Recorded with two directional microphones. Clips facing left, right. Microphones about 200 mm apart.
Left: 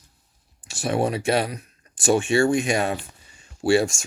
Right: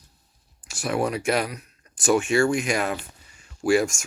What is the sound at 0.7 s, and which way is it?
Speech, 25° left (ahead or behind).